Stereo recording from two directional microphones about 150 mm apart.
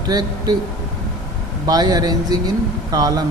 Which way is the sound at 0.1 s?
25° right (ahead or behind).